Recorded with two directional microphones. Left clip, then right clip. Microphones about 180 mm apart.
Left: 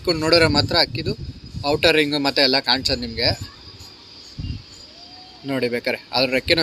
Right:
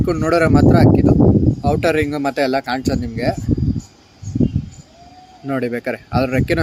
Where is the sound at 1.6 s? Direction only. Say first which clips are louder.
Left 2 dB; 45° right (ahead or behind).